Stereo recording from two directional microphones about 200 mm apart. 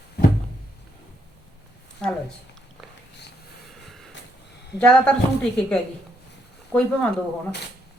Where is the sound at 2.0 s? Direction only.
5° left (ahead or behind).